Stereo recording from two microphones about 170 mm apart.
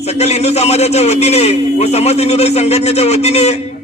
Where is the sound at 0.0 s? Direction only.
40° left (ahead or behind).